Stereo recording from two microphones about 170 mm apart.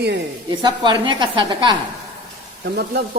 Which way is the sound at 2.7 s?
70° right (ahead or behind).